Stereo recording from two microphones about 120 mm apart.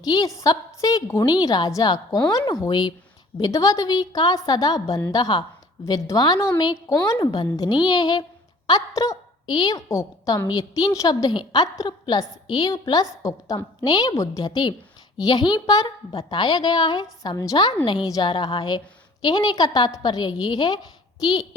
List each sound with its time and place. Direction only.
0.0 s a woman's voice: 30° left (ahead or behind)
6.8 s a woman's voice: 20° left (ahead or behind)
7.2 s a woman's voice: 35° left (ahead or behind)